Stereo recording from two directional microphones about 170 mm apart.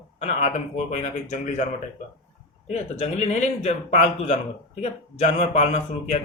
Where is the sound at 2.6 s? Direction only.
40° left (ahead or behind).